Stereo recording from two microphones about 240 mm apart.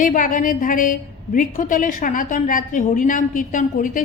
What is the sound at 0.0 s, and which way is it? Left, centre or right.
A woman's voice, left.